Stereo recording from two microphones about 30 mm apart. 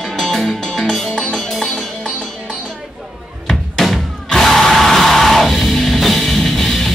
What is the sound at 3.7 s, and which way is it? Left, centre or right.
Music, centre.